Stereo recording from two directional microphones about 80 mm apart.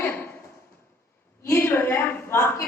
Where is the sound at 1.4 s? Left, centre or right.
Left.